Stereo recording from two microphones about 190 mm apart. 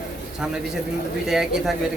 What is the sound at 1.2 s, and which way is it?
Speech, centre (ahead or behind).